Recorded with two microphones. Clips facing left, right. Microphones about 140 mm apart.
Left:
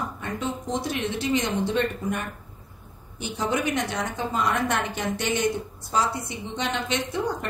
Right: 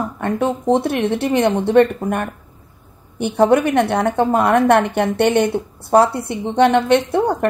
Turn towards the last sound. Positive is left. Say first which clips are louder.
# right 10 dB
turn(degrees=-60)  # may be behind; listen again after turning